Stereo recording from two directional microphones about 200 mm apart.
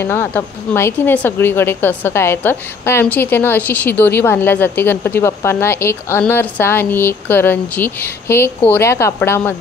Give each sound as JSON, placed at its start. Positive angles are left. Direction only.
{"t": 0.0, "sound": "a woman's voice", "side_deg": 10}